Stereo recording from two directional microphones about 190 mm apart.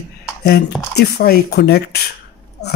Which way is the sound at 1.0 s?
60° left (ahead or behind).